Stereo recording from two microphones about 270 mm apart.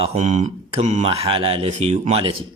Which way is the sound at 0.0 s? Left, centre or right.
Right.